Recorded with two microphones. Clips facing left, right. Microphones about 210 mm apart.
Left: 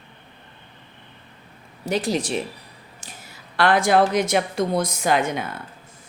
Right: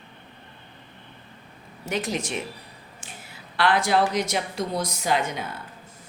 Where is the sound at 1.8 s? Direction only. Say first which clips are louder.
Left 5 dB; 35° left (ahead or behind); by 5.4 s 55° left (ahead or behind).